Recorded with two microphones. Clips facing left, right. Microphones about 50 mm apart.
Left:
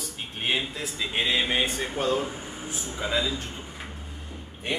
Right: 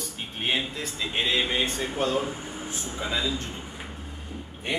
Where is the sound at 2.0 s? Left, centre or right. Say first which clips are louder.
Even; centre.